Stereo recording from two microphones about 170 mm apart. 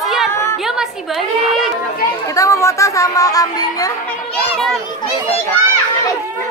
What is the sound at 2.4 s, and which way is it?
Speech, 15° left (ahead or behind).